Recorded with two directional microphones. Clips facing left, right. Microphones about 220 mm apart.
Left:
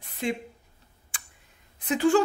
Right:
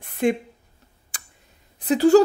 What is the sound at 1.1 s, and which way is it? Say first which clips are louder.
Tick: right 2 dB; 40° right (ahead or behind).